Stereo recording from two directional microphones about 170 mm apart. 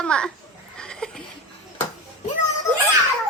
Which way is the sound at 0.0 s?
5° left (ahead or behind).